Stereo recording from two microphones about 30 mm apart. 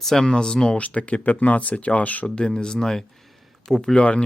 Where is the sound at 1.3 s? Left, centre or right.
Left.